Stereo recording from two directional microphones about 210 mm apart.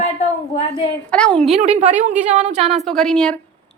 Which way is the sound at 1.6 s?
30° right (ahead or behind).